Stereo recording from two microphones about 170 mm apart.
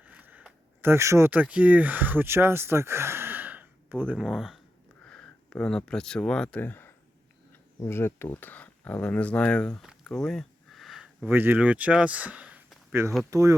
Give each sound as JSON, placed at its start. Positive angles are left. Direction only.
{"t": 0.1, "sound": "speech", "side_deg": -10}